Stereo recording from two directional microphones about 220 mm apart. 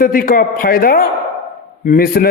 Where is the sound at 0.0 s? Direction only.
40° left (ahead or behind).